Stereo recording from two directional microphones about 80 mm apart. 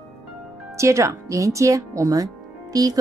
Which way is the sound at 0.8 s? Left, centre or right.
Right.